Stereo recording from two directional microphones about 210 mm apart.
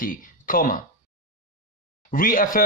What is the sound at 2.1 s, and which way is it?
Speech, 40° left (ahead or behind).